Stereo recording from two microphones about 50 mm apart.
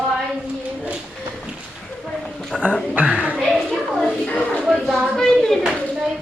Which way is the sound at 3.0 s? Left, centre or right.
Right.